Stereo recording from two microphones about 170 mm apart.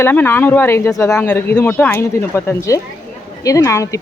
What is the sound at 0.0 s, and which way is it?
Speech, 10° left (ahead or behind).